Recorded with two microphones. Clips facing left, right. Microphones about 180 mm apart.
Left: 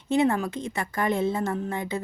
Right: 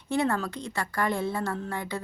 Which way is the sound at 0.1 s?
20° left (ahead or behind).